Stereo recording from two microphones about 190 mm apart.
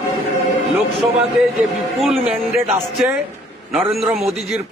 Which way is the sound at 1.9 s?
Centre (ahead or behind).